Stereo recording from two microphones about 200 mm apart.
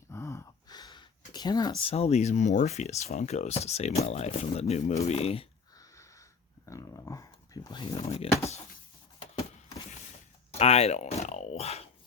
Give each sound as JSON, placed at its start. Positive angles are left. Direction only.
{"t": 0.1, "sound": "gasp", "side_deg": 15}
{"t": 1.8, "sound": "speech", "side_deg": 30}
{"t": 6.7, "sound": "a sound", "side_deg": 15}
{"t": 10.5, "sound": "speech", "side_deg": 30}